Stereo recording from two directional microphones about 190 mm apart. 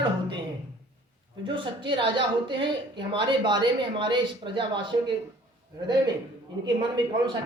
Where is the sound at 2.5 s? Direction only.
25° right (ahead or behind).